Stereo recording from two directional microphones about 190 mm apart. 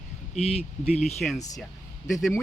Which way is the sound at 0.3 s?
35° left (ahead or behind).